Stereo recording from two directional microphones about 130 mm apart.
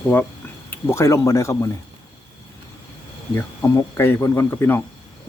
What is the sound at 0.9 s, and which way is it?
Speech, 20° left (ahead or behind).